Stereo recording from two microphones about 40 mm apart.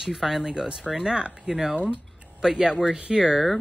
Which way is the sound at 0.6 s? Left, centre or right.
Centre.